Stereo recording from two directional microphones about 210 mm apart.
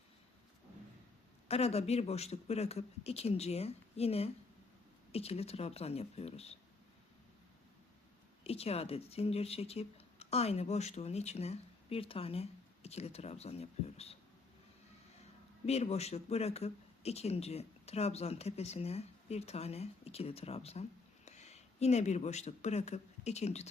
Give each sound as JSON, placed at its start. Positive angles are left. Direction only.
{"t": 1.5, "sound": "speech", "side_deg": 30}
{"t": 8.4, "sound": "speech", "side_deg": 30}
{"t": 15.6, "sound": "speech", "side_deg": 30}